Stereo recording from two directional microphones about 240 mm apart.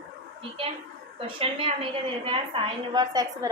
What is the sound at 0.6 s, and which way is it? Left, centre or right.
A woman's voice, right.